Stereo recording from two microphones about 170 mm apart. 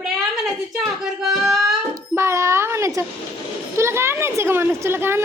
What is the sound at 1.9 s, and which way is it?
A child's voice, 15° right (ahead or behind).